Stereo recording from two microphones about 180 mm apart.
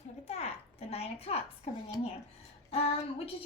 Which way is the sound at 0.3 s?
35° left (ahead or behind).